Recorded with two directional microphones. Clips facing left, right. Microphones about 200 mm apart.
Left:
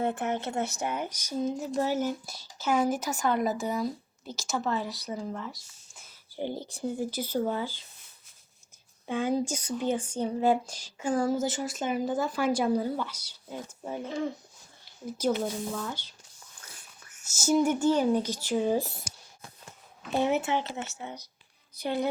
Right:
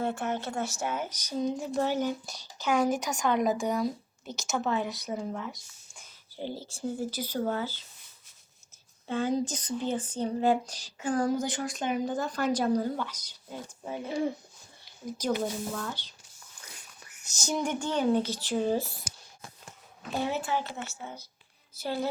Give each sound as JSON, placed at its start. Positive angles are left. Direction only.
{"t": 0.0, "sound": "a woman's voice", "side_deg": 20}
{"t": 6.4, "sound": "speech", "side_deg": 15}
{"t": 7.1, "sound": "speech", "side_deg": -10}
{"t": 7.3, "sound": "speech", "side_deg": 10}
{"t": 9.0, "sound": "speech", "side_deg": 10}
{"t": 13.8, "sound": "speech", "side_deg": -10}
{"t": 15.4, "sound": "speech", "side_deg": 5}
{"t": 17.2, "sound": "speech", "side_deg": 5}
{"t": 20.1, "sound": "speech", "side_deg": 20}
{"t": 21.8, "sound": "a woman's voice", "side_deg": -5}